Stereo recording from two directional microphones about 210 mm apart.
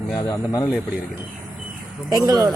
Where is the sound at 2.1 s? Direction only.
15° right (ahead or behind).